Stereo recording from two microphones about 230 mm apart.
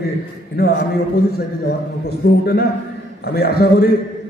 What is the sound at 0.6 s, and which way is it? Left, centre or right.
A man's voice, left.